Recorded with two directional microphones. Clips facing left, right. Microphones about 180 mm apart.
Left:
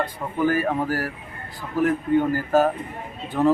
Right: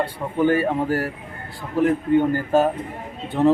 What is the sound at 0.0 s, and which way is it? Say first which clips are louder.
A man's voice: right 3 dB; 25° right (ahead or behind).